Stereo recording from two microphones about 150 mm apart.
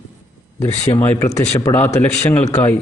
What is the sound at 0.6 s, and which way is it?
Speech, 45° left (ahead or behind).